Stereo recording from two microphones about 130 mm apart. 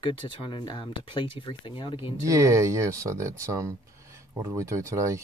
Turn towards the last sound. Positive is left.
turn(degrees=-25)  # may be behind; listen again after turning